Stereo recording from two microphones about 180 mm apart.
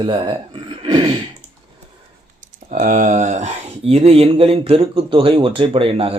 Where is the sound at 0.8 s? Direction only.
25° right (ahead or behind).